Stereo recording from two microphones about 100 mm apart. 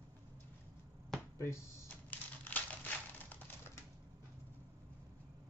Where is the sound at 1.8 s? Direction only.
15° left (ahead or behind).